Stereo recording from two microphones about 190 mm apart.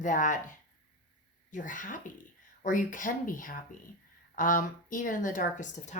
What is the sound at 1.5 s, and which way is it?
A woman's voice, 45° left (ahead or behind).